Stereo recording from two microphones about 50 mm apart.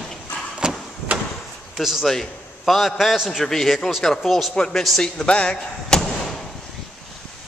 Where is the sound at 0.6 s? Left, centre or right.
Centre.